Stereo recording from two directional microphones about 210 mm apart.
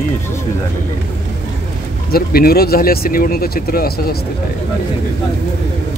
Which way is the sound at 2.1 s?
45° left (ahead or behind).